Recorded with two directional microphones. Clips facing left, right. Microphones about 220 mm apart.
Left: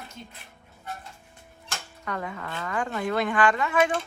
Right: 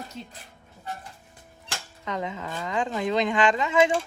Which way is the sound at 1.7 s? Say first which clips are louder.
Right 2 dB; 20° right (ahead or behind).